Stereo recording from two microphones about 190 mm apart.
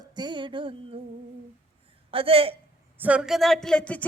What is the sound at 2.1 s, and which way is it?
Speech, 30° right (ahead or behind).